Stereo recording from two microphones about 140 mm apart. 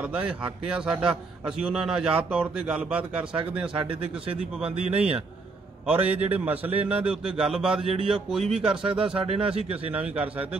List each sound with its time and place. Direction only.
0.7 s a man's voice: 5° right (ahead or behind)
5.9 s a man's voice: 10° right (ahead or behind)
7.8 s speech: 40° right (ahead or behind)
8.1 s a man's voice: centre (ahead or behind)